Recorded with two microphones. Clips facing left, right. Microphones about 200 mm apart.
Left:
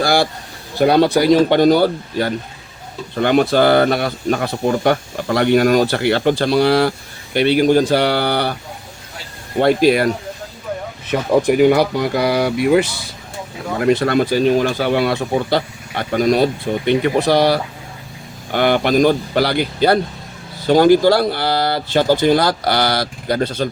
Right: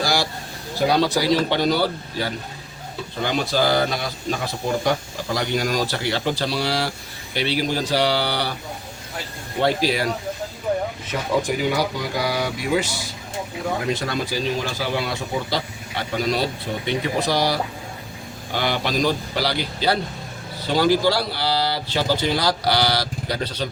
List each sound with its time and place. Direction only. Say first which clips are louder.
0.0 s a sound: left 7 dB; 55° left (ahead or behind)
0.8 s a man's voice: left 7 dB; 60° left (ahead or behind)
9.6 s a man's voice: left 8 dB; 55° left (ahead or behind)
11.1 s a man's voice: left 9 dB; 60° left (ahead or behind)